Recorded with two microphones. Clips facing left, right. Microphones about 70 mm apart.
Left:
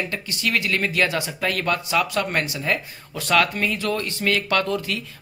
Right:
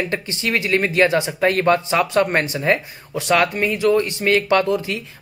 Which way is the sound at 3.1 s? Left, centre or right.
Centre.